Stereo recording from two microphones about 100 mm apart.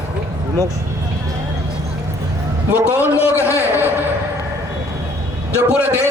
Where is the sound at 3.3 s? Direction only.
25° left (ahead or behind).